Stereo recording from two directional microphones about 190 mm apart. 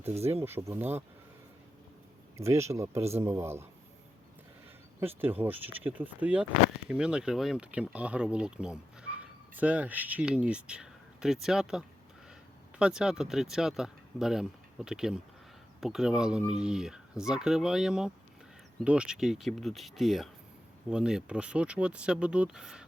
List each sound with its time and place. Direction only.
0.1 s speech: 35° right (ahead or behind)
0.4 s a man's voice: 15° right (ahead or behind)
2.4 s a man's voice: 15° right (ahead or behind)
4.9 s speech: 10° right (ahead or behind)